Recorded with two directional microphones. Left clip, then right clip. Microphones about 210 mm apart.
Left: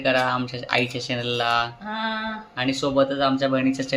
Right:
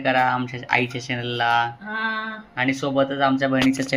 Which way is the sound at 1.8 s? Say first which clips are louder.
Right 2 dB; 55° left (ahead or behind).